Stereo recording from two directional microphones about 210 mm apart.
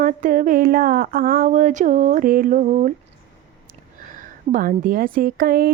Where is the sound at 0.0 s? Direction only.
40° right (ahead or behind).